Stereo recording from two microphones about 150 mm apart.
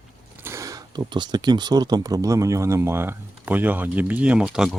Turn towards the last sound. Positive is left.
turn(degrees=-5)  # may be behind; listen again after turning